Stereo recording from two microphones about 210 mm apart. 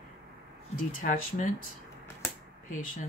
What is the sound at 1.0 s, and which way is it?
Speech, 40° left (ahead or behind).